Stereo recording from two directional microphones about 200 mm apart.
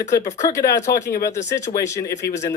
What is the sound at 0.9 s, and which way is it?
Speech, 50° left (ahead or behind).